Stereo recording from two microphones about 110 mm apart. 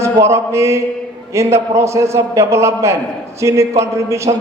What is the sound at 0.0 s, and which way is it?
Mantra, 25° right (ahead or behind).